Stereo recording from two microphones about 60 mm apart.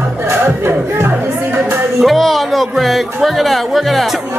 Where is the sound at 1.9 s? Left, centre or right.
Centre.